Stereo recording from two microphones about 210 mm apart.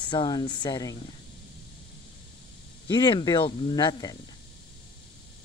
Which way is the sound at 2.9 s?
20° left (ahead or behind).